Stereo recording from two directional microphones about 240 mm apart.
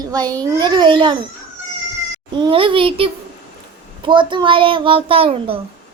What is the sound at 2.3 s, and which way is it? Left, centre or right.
A child's voice, right.